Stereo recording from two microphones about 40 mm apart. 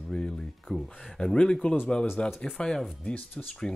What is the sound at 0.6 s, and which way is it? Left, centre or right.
Speech, centre.